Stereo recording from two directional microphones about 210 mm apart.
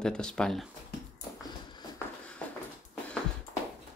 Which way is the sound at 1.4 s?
20° left (ahead or behind).